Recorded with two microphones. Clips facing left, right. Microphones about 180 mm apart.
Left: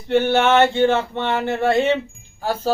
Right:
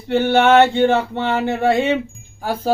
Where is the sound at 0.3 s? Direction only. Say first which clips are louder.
Right 6 dB; 15° right (ahead or behind).